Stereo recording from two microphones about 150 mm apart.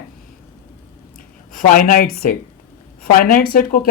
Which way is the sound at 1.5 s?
70° left (ahead or behind).